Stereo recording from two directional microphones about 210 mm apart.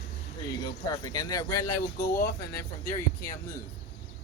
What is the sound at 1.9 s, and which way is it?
Speech, 50° left (ahead or behind).